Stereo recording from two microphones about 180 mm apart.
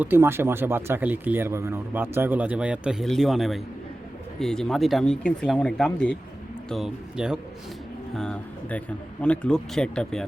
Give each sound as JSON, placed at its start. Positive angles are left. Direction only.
{"t": 0.0, "sound": "speech", "side_deg": -10}